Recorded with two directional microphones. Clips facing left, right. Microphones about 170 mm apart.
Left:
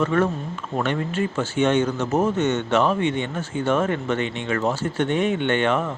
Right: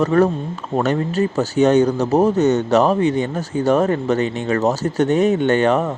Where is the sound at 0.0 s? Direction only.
40° right (ahead or behind).